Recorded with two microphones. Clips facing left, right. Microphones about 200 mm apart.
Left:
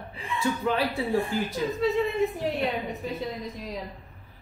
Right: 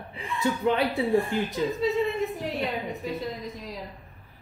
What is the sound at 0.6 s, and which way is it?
Speech, 20° right (ahead or behind).